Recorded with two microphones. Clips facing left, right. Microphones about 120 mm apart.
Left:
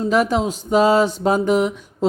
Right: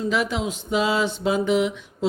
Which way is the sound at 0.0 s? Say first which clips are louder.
Left 6 dB; 45° left (ahead or behind).